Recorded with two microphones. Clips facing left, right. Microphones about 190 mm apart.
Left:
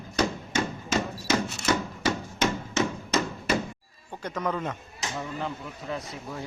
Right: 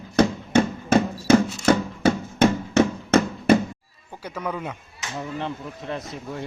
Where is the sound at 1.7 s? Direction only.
60° right (ahead or behind).